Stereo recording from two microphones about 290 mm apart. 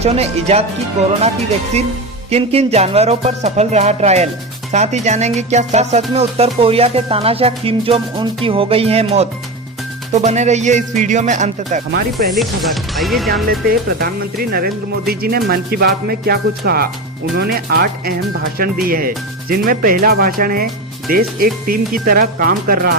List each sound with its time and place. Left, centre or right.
0.0 s music: right
2.3 s music: right
12.3 s speech: centre
13.5 s speech: right